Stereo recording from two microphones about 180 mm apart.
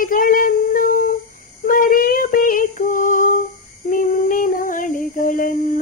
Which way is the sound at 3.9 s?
50° left (ahead or behind).